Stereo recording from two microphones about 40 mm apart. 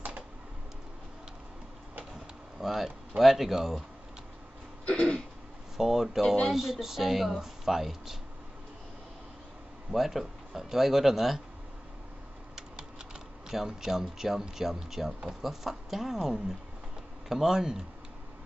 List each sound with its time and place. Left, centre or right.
2.6 s speech: centre
4.8 s throat clearing: left
5.8 s speech: centre
9.8 s speech: centre
12.5 s typing: centre
14.5 s speech: centre